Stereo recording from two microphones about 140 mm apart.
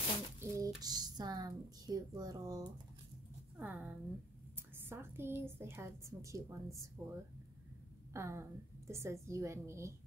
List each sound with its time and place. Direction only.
0.4 s speech: 25° right (ahead or behind)
3.5 s a woman's voice: 15° right (ahead or behind)